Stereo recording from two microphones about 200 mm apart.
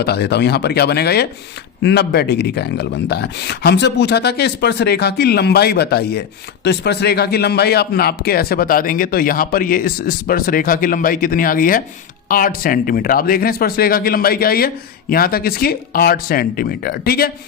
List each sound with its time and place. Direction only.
0.0 s speech: 55° left (ahead or behind)